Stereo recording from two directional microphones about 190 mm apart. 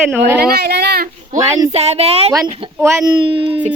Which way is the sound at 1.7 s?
35° right (ahead or behind).